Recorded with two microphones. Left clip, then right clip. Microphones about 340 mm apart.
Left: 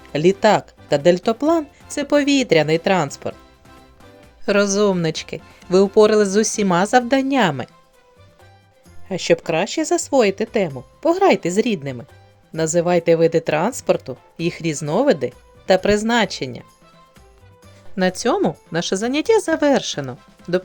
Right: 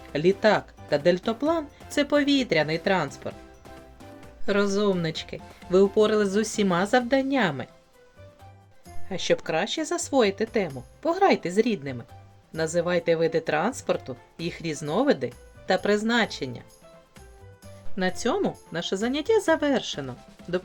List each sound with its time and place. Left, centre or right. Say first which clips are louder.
0.1 s speech: left 6 dB; left
4.4 s speech: left 7 dB; left
9.0 s speech: left 7 dB; left
17.9 s speech: left 7 dB; left